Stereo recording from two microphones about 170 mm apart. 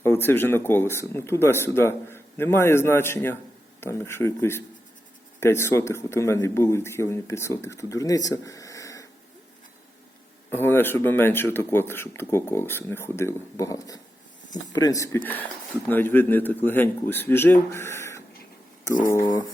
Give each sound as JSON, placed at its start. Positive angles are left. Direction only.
{"t": 0.0, "sound": "speech", "side_deg": 15}
{"t": 10.5, "sound": "speech", "side_deg": 10}